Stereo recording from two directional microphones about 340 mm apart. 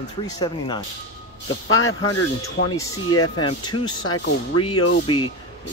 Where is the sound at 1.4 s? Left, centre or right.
Left.